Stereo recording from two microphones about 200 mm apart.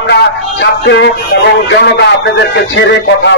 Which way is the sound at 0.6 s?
60° left (ahead or behind).